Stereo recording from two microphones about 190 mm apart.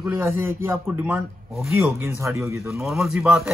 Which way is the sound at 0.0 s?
10° right (ahead or behind).